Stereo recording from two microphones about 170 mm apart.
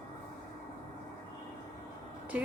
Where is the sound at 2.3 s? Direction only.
10° right (ahead or behind).